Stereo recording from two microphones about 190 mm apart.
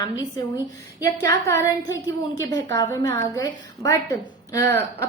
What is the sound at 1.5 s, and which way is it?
A woman's voice, 15° left (ahead or behind).